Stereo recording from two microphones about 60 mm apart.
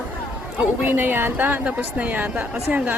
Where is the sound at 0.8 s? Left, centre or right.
Right.